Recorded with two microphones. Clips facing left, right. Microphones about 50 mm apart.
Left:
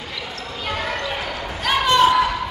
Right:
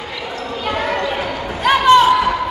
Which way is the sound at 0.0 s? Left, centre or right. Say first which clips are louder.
Right 5 dB; right.